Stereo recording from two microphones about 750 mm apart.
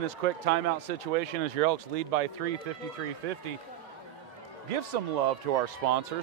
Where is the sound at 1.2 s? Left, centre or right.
Right.